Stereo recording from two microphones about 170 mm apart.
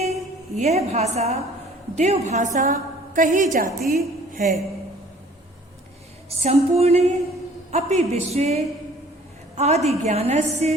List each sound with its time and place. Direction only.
0.6 s a woman's voice: 40° right (ahead or behind); by 4.5 s 55° right (ahead or behind)
6.4 s speech: 40° right (ahead or behind)